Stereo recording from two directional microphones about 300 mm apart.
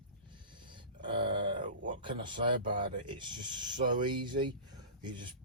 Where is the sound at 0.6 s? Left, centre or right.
Centre.